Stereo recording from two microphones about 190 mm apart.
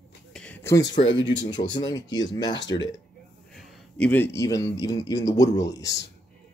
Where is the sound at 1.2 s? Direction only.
75° left (ahead or behind).